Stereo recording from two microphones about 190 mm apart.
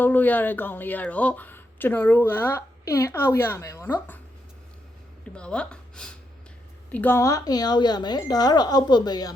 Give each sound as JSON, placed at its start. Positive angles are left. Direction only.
{"t": 0.0, "sound": "speech", "side_deg": 10}
{"t": 5.3, "sound": "speech", "side_deg": 5}